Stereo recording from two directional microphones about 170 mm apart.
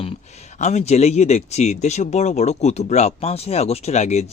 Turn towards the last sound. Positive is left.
turn(degrees=40)  # may be behind; listen again after turning